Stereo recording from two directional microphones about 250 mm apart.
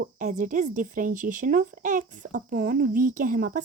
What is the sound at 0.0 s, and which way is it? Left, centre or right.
Speech, right.